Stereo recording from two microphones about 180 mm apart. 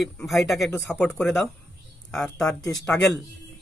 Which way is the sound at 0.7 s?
10° left (ahead or behind).